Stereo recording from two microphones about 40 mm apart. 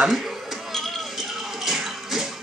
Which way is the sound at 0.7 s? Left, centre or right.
Centre.